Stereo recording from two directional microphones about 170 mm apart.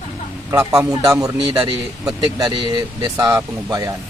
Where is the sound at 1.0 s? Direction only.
20° right (ahead or behind).